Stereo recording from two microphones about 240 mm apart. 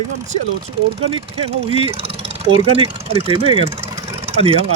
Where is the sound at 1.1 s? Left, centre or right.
Right.